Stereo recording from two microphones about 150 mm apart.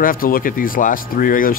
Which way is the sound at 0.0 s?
70° left (ahead or behind).